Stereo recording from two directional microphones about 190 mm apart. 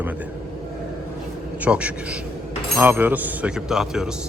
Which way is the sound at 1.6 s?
5° right (ahead or behind).